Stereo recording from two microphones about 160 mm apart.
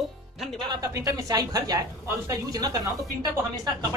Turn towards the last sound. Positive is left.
turn(degrees=-25)  # may be behind; listen again after turning